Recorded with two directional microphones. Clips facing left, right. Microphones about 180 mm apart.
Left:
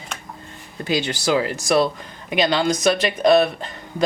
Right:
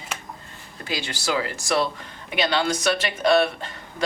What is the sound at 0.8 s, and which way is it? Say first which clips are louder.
Speech: left 7 dB; 20° left (ahead or behind).